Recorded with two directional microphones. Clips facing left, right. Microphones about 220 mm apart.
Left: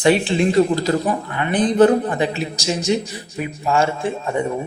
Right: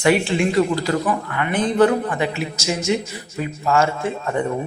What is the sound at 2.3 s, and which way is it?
Speech, 30° left (ahead or behind).